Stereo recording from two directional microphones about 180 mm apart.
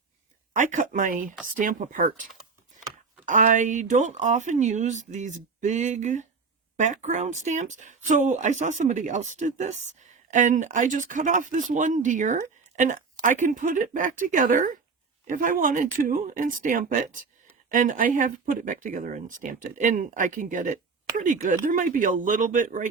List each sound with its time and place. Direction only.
0.5 s speech: 45° right (ahead or behind)
3.2 s speech: 45° right (ahead or behind)